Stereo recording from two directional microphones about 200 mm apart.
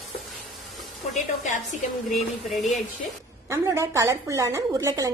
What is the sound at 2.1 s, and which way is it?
Speech, centre (ahead or behind).